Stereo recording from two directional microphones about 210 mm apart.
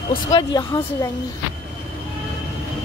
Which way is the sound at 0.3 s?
20° left (ahead or behind).